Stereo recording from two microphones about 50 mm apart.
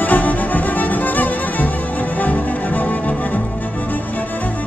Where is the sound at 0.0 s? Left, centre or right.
Left.